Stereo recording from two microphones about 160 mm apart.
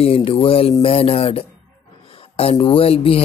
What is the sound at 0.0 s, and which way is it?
A man's voice, 35° left (ahead or behind).